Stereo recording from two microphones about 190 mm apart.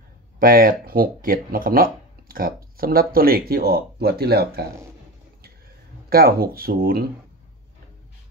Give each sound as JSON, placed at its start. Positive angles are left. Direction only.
{"t": 0.4, "sound": "speech", "side_deg": -50}
{"t": 6.0, "sound": "speech", "side_deg": -50}